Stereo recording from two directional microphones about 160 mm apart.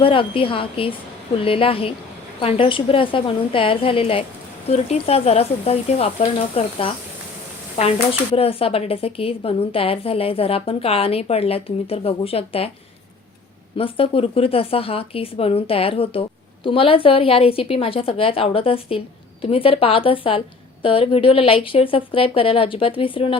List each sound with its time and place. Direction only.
0.0 s a woman's voice: 35° left (ahead or behind)
8.4 s a woman's voice: 35° left (ahead or behind)
13.7 s a woman's voice: 35° left (ahead or behind)